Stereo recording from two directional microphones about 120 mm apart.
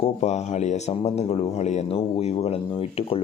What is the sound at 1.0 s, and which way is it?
A man's voice, 60° left (ahead or behind).